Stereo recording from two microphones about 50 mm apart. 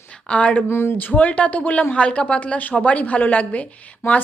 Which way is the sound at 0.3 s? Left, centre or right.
Left.